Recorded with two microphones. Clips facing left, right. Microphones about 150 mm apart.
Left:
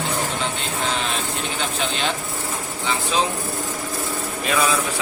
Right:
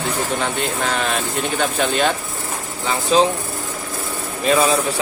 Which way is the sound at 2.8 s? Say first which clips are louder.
Right 6 dB; 40° right (ahead or behind).